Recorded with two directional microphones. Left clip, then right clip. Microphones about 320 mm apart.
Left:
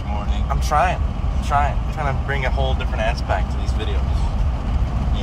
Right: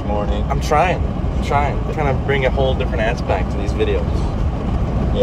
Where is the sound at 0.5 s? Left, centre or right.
Left.